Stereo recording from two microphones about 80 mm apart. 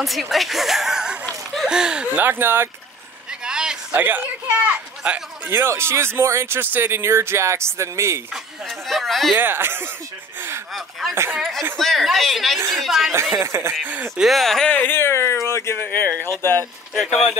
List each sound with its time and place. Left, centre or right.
0.0 s speech: centre
2.2 s speech: right
3.4 s a sound: centre
3.9 s speech: right
5.5 s speech: right
8.3 s speech: centre
9.4 s speech: right
10.7 s speech: centre
13.1 s speech: right
14.1 s speech: centre
14.7 s speech: left
16.9 s speech: centre